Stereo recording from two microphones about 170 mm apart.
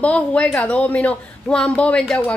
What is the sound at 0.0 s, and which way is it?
A woman's voice, 5° left (ahead or behind).